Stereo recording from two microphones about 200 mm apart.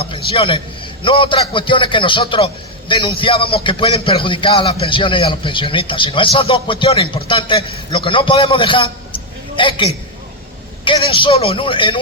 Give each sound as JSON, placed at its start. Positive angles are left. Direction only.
{"t": 0.0, "sound": "a man's voice", "side_deg": 30}
{"t": 10.8, "sound": "speech", "side_deg": 25}